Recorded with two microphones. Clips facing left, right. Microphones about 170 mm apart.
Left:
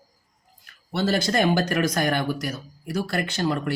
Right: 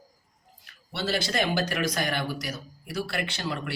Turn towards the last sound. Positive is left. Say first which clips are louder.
# left 7 dB
turn(degrees=45)  # may be behind; listen again after turning